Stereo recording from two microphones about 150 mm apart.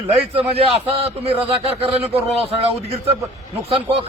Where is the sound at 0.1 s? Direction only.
40° right (ahead or behind).